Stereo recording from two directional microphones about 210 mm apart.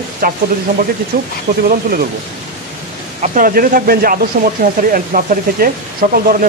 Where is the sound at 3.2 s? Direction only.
40° right (ahead or behind).